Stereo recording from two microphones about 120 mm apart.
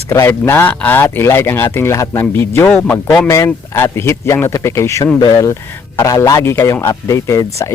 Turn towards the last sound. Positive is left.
turn(degrees=25)  # may be behind; listen again after turning